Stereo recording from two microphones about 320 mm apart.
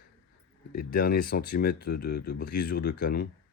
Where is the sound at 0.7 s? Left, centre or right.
Left.